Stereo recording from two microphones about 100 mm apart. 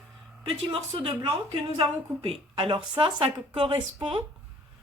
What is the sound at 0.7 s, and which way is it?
Speech, 65° right (ahead or behind).